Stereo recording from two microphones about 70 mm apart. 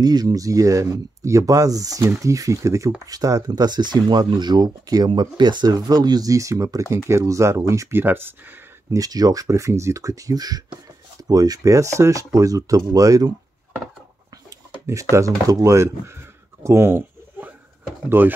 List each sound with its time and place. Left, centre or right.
0.0 s speech: right
3.1 s speech: right
7.9 s speech: right
8.9 s speech: right
11.7 s speech: right
14.9 s speech: right
18.2 s speech: right